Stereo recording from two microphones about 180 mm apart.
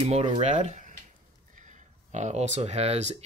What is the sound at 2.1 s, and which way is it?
Speech, 40° right (ahead or behind).